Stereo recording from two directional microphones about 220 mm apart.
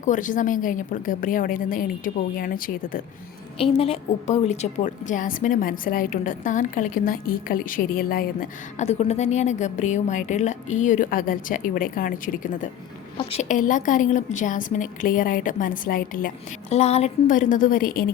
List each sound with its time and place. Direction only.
0.0 s a woman's voice: 35° left (ahead or behind)
3.6 s a woman's voice: 25° left (ahead or behind)